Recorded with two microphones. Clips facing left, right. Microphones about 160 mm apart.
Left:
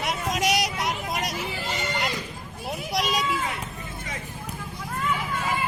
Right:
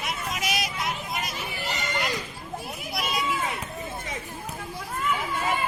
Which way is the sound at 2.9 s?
90° left.